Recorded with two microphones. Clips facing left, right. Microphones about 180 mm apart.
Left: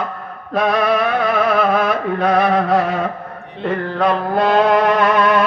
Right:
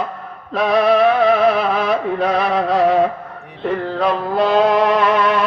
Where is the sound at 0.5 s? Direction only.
50° left (ahead or behind).